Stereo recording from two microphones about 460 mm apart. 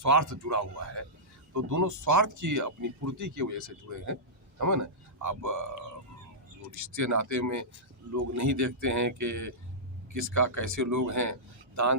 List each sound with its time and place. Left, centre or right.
0.0 s speech: right
6.9 s speech: right